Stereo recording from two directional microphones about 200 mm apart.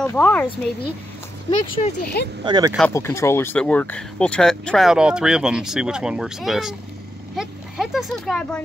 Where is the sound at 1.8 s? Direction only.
30° left (ahead or behind).